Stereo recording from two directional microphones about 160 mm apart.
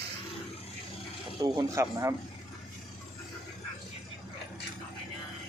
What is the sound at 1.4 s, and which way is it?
Speech, 20° right (ahead or behind).